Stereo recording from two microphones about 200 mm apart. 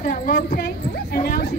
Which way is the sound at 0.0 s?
45° left (ahead or behind).